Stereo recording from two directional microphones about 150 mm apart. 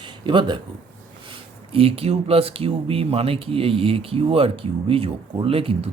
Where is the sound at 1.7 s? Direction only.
40° right (ahead or behind).